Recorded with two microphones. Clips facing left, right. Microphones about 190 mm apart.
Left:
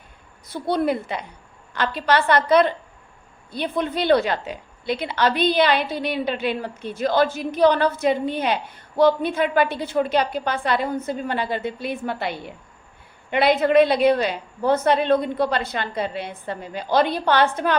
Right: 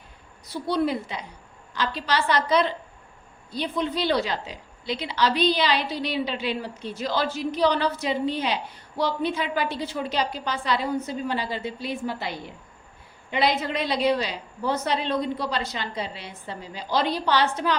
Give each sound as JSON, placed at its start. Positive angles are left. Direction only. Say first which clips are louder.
{"t": 0.4, "sound": "a woman's voice", "louder": "left 3 dB", "side_deg": 55}